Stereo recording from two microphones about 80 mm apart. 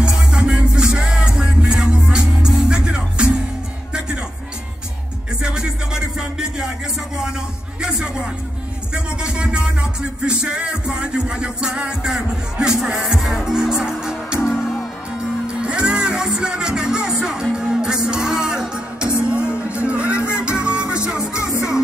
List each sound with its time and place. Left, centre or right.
0.0 s music: centre
5.4 s music: centre
7.8 s music: centre
15.6 s music: centre
21.4 s music: left